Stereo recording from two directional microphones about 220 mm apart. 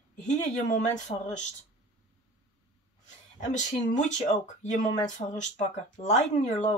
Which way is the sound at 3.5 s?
35° left (ahead or behind).